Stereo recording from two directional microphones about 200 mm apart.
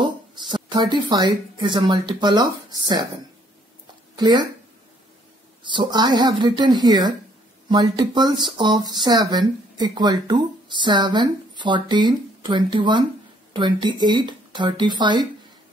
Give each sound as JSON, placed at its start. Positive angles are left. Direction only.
{"t": 0.0, "sound": "speech", "side_deg": -25}
{"t": 4.2, "sound": "speech", "side_deg": -20}
{"t": 5.6, "sound": "speech", "side_deg": -25}